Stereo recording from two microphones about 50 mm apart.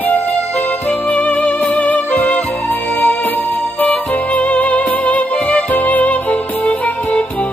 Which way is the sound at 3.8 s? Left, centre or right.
Left.